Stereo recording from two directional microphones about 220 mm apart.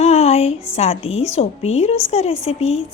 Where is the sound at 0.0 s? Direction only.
30° left (ahead or behind).